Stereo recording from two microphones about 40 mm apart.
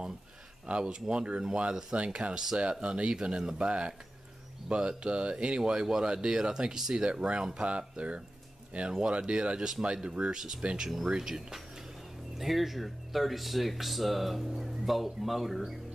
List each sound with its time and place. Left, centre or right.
0.7 s speech: right
7.1 s speech: right
10.8 s speech: centre
11.1 s speech: centre
12.4 s speech: centre